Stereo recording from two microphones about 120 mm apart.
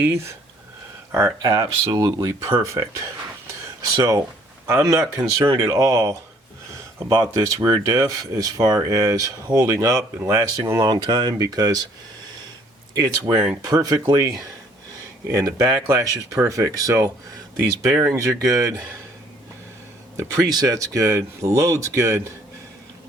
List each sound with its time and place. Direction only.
0.0 s speech: 25° right (ahead or behind)
4.9 s speech: 25° right (ahead or behind)
12.9 s speech: 35° right (ahead or behind)
13.3 s speech: 10° right (ahead or behind)
13.6 s speech: 30° right (ahead or behind)
15.3 s speech: 30° right (ahead or behind)
20.1 s speech: 25° right (ahead or behind)